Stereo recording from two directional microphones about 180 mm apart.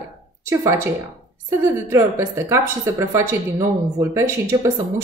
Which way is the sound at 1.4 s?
15° right (ahead or behind).